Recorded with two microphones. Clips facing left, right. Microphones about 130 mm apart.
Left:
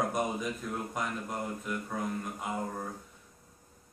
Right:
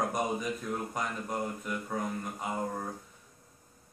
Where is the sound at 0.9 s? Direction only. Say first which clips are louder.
Right 1 dB; centre (ahead or behind).